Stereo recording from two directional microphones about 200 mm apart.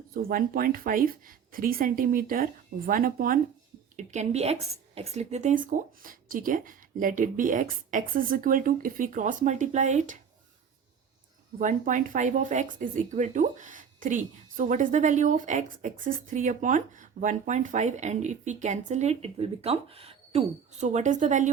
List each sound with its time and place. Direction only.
0.1 s speech: 45° right (ahead or behind)
11.6 s speech: 40° right (ahead or behind)